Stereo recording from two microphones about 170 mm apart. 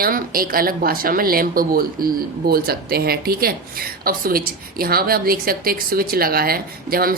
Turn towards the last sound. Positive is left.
turn(degrees=-60)  # may be behind; listen again after turning